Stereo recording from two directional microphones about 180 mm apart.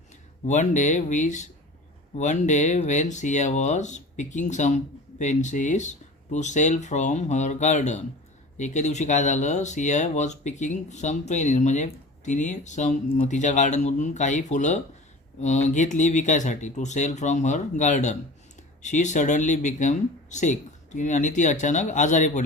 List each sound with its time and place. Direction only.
0.4 s speech: 40° left (ahead or behind)